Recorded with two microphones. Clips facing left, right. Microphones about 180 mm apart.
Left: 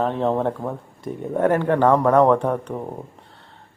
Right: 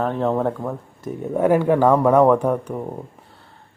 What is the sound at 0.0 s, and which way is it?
Speech, centre (ahead or behind).